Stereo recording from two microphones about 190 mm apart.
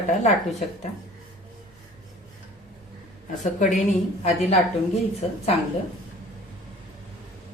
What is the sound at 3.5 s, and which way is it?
Speech, 40° left (ahead or behind).